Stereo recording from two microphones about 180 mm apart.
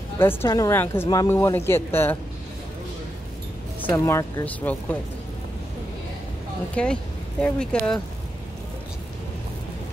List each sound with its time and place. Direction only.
0.2 s speech: 15° left (ahead or behind)
3.8 s speech: 20° left (ahead or behind)
6.7 s speech: 5° left (ahead or behind)